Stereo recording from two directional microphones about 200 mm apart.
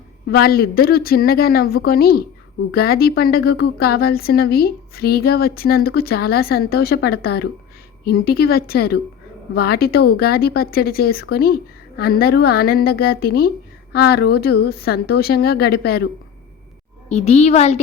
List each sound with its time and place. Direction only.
0.3 s speech: 50° left (ahead or behind)
17.1 s a child's voice: 35° left (ahead or behind)